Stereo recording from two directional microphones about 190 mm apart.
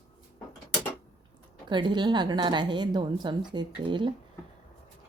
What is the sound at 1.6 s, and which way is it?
A woman's voice, 25° right (ahead or behind).